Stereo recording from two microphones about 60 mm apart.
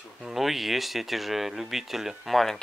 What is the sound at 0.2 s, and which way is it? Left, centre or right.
Speech, centre.